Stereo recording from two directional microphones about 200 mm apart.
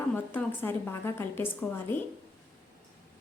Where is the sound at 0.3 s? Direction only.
10° left (ahead or behind).